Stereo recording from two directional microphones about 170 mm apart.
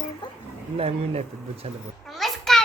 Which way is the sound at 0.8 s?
40° right (ahead or behind).